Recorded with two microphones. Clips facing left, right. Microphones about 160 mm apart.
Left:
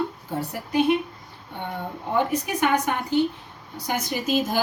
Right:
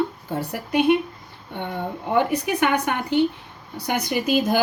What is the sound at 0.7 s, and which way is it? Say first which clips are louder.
Speech: right 2 dB; 65° right (ahead or behind).